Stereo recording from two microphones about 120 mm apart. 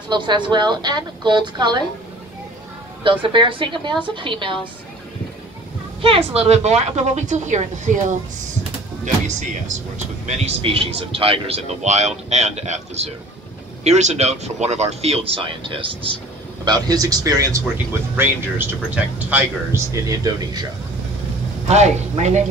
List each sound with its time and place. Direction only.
0.1 s a woman's voice: 40° right (ahead or behind)
3.0 s speech: 45° right (ahead or behind)
6.0 s a woman's voice: 55° right (ahead or behind); by 8.0 s 90° right
9.0 s speech: 85° right
10.2 s a woman's voice: 70° right (ahead or behind)
10.6 s a woman's voice: 50° right (ahead or behind)
16.6 s a woman's voice: 35° right (ahead or behind)
18.1 s a man's voice: 20° right (ahead or behind)
19.9 s a woman's voice: 30° right (ahead or behind)
21.6 s a woman's voice: 65° right (ahead or behind)